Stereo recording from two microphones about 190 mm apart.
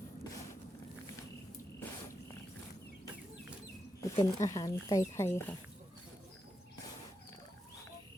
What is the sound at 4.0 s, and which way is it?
Speech, 15° left (ahead or behind).